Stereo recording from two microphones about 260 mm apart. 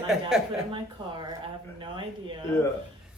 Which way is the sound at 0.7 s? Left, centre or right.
Centre.